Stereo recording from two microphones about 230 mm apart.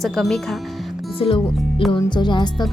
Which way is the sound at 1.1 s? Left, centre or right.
Left.